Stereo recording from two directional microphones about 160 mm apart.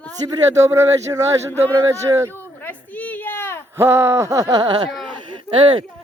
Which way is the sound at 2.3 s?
10° left (ahead or behind).